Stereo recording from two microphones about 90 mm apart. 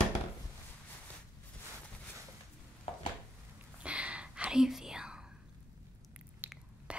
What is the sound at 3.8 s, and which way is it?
Whispering, 15° right (ahead or behind).